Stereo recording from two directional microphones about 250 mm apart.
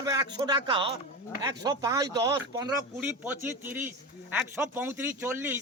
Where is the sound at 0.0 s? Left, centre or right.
Centre.